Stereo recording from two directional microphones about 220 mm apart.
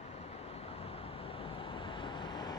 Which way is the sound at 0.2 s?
25° left (ahead or behind).